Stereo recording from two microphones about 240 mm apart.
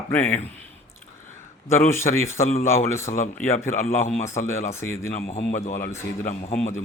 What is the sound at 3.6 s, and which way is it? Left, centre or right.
Speech, left.